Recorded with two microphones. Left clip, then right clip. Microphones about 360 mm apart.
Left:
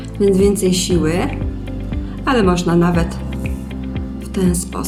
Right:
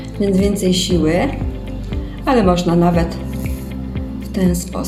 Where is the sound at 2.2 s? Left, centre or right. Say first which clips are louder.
Right 1 dB; left.